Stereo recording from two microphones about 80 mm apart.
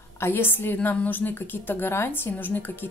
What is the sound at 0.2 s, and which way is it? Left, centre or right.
A woman's voice, left.